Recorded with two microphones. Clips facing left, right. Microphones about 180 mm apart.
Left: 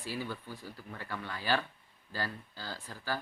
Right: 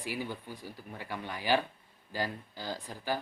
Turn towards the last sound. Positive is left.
turn(degrees=-15)  # may be behind; listen again after turning